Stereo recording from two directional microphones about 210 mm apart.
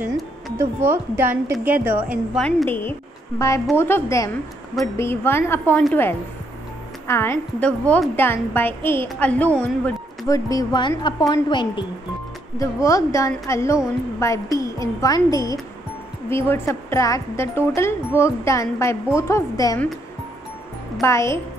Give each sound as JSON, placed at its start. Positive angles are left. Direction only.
{"t": 0.6, "sound": "a woman's voice", "side_deg": -10}
{"t": 2.4, "sound": "a woman's voice", "side_deg": 10}
{"t": 21.0, "sound": "speech", "side_deg": 15}